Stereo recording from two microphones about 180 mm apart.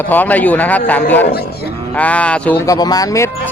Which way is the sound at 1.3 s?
60° left (ahead or behind).